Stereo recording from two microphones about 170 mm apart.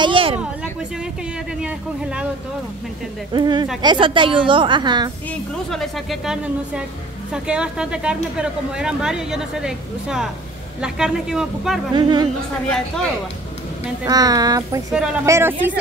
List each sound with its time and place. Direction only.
0.0 s a sound: 30° right (ahead or behind)
1.6 s speech: 5° right (ahead or behind)
3.3 s a woman's voice: 25° right (ahead or behind)
5.7 s speech: centre (ahead or behind)
11.9 s a woman's voice: 25° right (ahead or behind)
12.6 s speech: 5° left (ahead or behind)
14.0 s a woman's voice: 20° right (ahead or behind)